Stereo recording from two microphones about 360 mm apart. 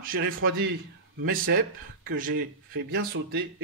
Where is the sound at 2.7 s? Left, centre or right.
Right.